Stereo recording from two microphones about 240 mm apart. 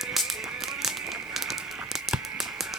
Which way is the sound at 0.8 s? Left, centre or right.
Centre.